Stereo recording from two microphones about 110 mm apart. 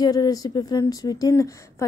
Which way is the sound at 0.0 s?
35° left (ahead or behind).